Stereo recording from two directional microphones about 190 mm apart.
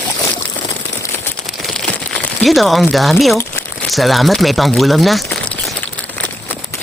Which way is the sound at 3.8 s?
Centre (ahead or behind).